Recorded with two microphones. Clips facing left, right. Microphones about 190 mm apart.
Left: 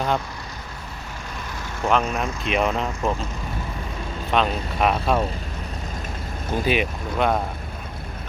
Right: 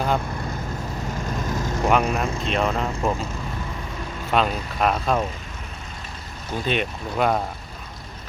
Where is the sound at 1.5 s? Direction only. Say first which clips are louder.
Right 3 dB; 40° right (ahead or behind).